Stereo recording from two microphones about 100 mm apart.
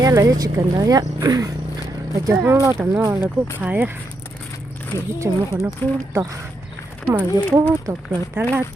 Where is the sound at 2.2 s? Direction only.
25° right (ahead or behind).